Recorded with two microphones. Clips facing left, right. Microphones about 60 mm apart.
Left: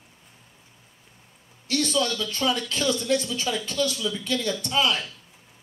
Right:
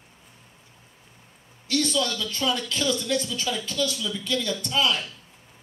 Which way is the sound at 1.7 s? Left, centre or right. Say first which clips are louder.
Even; left.